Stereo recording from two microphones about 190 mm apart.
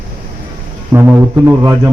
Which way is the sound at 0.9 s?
15° right (ahead or behind).